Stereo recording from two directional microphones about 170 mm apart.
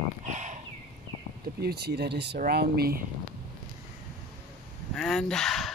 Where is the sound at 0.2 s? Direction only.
45° right (ahead or behind).